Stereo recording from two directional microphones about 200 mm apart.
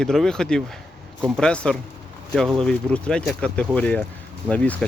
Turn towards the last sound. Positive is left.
turn(degrees=5)  # may be behind; listen again after turning